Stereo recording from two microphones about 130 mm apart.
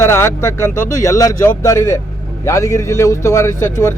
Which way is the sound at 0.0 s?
20° left (ahead or behind).